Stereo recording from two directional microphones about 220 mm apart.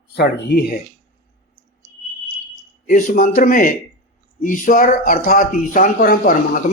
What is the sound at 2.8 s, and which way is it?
Speech, 40° left (ahead or behind).